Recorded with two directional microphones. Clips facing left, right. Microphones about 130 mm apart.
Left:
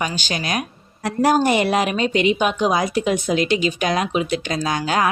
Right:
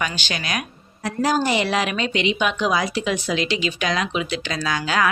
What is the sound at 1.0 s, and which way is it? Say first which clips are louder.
A woman's voice: left 4 dB; 60° left (ahead or behind).